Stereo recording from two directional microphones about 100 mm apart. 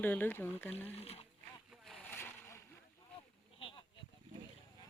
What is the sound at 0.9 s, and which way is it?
Speech, 90° left.